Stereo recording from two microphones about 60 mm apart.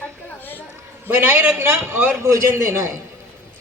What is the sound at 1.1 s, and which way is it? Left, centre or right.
Speech, right.